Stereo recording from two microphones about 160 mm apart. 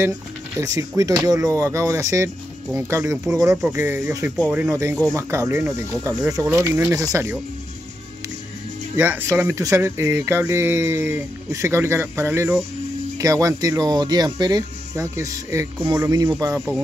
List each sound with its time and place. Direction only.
0.6 s speech: 20° right (ahead or behind)
8.9 s speech: 15° right (ahead or behind)
16.5 s speech: centre (ahead or behind)